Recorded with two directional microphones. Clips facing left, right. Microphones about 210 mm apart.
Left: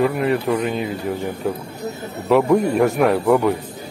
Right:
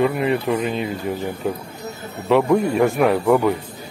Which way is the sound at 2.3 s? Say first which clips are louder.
Left 1 dB; centre (ahead or behind).